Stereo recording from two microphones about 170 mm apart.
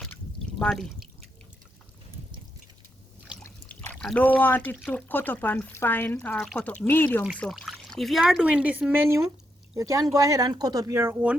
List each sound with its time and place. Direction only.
0.0 s pour: 5° left (ahead or behind)
3.4 s speech: 10° left (ahead or behind); by 11.3 s 10° right (ahead or behind)